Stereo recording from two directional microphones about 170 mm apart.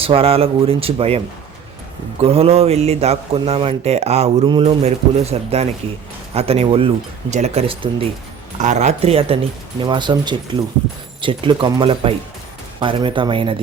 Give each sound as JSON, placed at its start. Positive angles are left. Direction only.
{"t": 0.0, "sound": "speech", "side_deg": -35}
{"t": 2.2, "sound": "speech", "side_deg": -35}
{"t": 8.5, "sound": "speech", "side_deg": -45}